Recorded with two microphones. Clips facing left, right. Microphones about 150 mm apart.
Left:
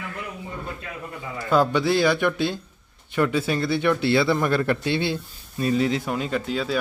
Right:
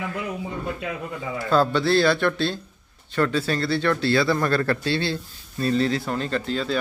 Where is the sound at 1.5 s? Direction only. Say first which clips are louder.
Even; 15° left (ahead or behind).